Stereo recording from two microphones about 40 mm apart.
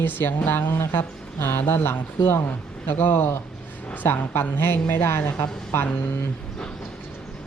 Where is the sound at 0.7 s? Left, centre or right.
Left.